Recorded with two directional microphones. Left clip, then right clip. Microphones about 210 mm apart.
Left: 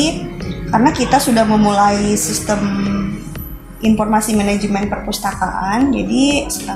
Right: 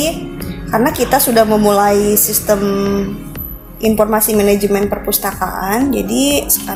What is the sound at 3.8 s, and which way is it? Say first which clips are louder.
A woman's voice: right 3 dB; 50° right (ahead or behind).